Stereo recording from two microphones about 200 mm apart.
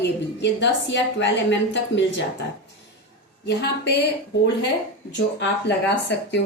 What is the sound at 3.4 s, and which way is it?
Speech, 60° left (ahead or behind).